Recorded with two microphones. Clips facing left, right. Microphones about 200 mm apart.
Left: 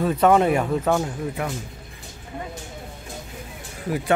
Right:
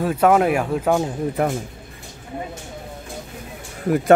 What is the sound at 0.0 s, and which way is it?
Speech, 5° right (ahead or behind).